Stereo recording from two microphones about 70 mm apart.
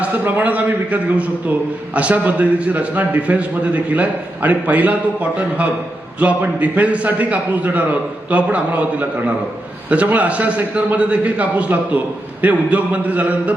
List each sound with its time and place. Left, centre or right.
0.0 s a man's voice: right
6.1 s a man's voice: right